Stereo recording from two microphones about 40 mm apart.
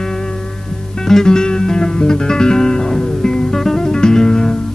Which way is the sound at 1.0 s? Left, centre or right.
Centre.